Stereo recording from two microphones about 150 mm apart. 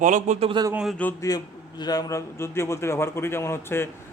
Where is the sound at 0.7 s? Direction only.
5° right (ahead or behind).